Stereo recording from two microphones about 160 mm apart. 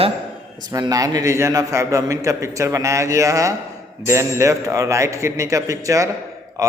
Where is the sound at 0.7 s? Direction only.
20° right (ahead or behind).